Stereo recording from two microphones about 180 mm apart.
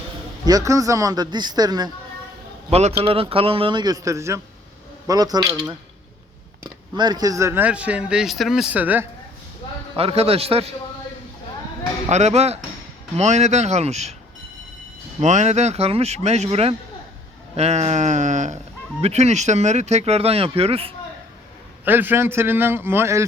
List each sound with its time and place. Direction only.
0.4 s a man's voice: 20° right (ahead or behind)
2.6 s a man's voice: 35° right (ahead or behind)
6.9 s speech: 25° right (ahead or behind)
9.9 s speech: 30° right (ahead or behind)
12.0 s speech: 40° right (ahead or behind)
15.2 s speech: 40° right (ahead or behind)
21.8 s speech: 10° right (ahead or behind)